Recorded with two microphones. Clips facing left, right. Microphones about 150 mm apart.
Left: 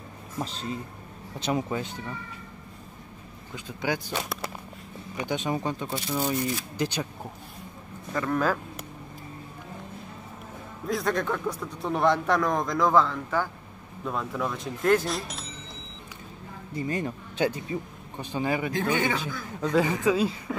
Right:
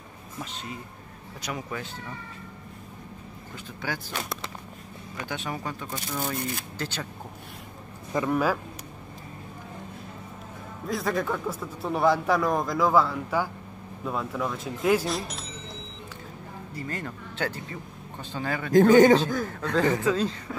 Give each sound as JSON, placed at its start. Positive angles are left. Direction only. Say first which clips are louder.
{"t": 0.4, "sound": "speech", "louder": "left 5 dB", "side_deg": 35}
{"t": 3.5, "sound": "a man's voice", "louder": "left 5 dB", "side_deg": 15}
{"t": 8.1, "sound": "speech", "louder": "right 1 dB", "side_deg": -15}
{"t": 10.9, "sound": "a man's voice", "louder": "left 1 dB", "side_deg": 0}
{"t": 16.7, "sound": "a man's voice", "louder": "left 6 dB", "side_deg": 15}
{"t": 18.7, "sound": "a man's voice", "louder": "right 11 dB", "side_deg": -45}
{"t": 19.5, "sound": "a man's voice", "louder": "left 3 dB", "side_deg": 10}